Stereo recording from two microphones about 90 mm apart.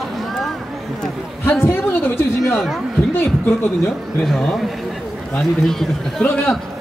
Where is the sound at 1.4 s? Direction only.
25° left (ahead or behind).